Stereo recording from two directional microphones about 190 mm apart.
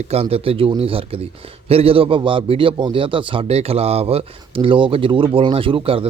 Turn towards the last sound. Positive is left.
turn(degrees=-30)  # may be behind; listen again after turning